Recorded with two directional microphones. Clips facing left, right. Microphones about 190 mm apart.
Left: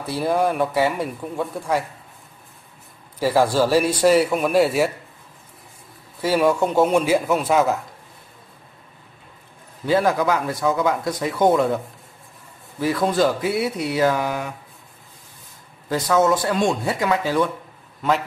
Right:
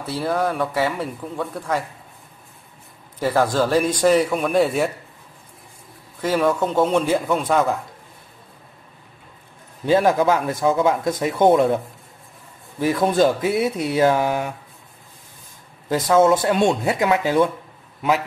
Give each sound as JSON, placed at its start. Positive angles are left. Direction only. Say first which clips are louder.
{"t": 0.0, "sound": "speech", "louder": "left 2 dB", "side_deg": 10}
{"t": 3.2, "sound": "speech", "louder": "left 1 dB", "side_deg": 10}
{"t": 6.2, "sound": "speech", "louder": "left 1 dB", "side_deg": 10}
{"t": 9.8, "sound": "speech", "louder": "right 2 dB", "side_deg": -25}
{"t": 12.8, "sound": "speech", "louder": "right 2 dB", "side_deg": -20}
{"t": 16.2, "sound": "speech", "louder": "right 3 dB", "side_deg": -25}